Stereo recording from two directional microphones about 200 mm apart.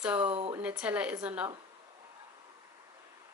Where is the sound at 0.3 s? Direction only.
30° right (ahead or behind).